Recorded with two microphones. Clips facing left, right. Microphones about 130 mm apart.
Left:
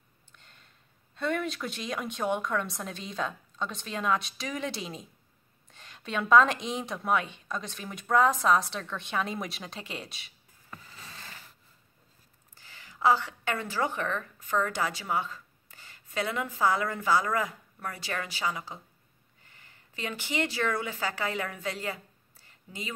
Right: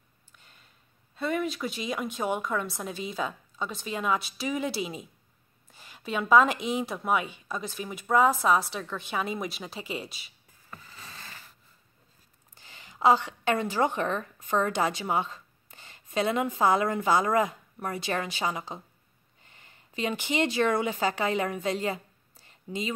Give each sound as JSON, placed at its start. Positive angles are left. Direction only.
{"t": 0.3, "sound": "a sound", "side_deg": -5}
{"t": 1.1, "sound": "a woman's voice", "side_deg": -5}
{"t": 12.5, "sound": "a woman's voice", "side_deg": -20}